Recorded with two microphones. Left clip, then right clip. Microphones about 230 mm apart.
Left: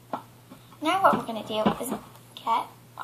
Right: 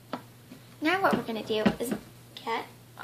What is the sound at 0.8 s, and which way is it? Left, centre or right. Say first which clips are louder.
A child's voice: left 4 dB; right.